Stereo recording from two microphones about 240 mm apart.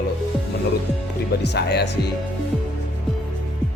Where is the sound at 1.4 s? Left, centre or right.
Left.